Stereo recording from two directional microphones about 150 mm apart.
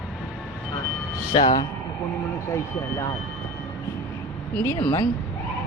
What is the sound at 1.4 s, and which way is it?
Speech, 30° left (ahead or behind).